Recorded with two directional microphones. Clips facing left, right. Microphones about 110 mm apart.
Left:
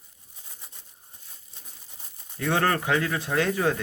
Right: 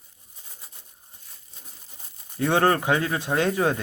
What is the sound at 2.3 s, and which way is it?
Speech, 25° right (ahead or behind).